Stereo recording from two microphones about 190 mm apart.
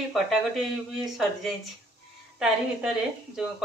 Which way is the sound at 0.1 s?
Centre (ahead or behind).